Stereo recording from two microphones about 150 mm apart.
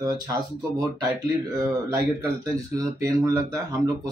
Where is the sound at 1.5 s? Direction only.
20° right (ahead or behind).